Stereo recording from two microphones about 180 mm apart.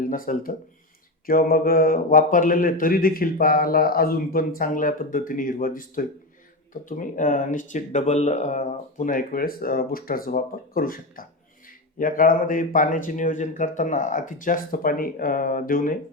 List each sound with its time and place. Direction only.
0.1 s speech: 50° left (ahead or behind)